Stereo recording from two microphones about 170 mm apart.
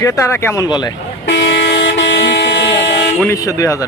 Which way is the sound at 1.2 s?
90° left.